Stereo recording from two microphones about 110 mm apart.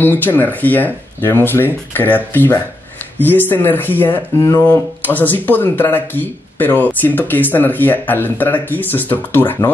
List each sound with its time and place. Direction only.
0.0 s speech: 15° left (ahead or behind)
4.4 s speech: 30° left (ahead or behind)
4.6 s speech: 15° left (ahead or behind)